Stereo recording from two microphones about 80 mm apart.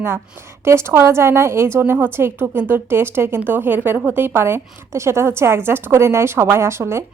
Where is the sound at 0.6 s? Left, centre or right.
Right.